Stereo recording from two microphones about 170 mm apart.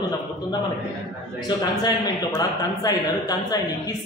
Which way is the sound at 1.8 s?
20° left (ahead or behind).